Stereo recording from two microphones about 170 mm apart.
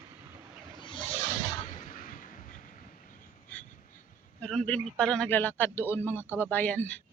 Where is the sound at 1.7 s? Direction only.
55° left (ahead or behind).